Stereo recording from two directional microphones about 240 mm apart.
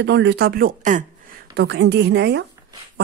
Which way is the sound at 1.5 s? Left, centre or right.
Right.